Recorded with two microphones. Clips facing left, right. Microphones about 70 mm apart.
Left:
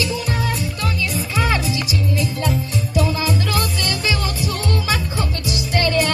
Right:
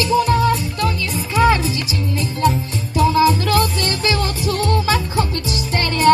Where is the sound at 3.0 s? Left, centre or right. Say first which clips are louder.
Right 7 dB; right.